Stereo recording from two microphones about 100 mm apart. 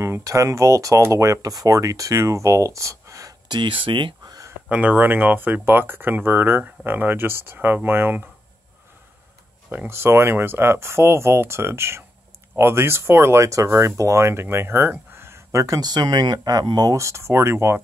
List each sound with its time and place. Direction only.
0.0 s speech: 30° right (ahead or behind)
3.4 s speech: 55° right (ahead or behind)
4.3 s a sound: 35° right (ahead or behind)
4.6 s speech: 15° right (ahead or behind)
9.7 s speech: 25° right (ahead or behind)
15.8 s speech: 45° right (ahead or behind)
16.9 s speech: 30° right (ahead or behind)